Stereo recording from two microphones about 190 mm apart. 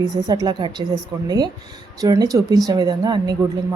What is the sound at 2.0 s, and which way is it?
A woman's voice, 20° right (ahead or behind).